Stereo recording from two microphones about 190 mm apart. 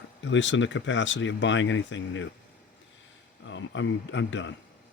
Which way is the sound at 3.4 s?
75° left (ahead or behind).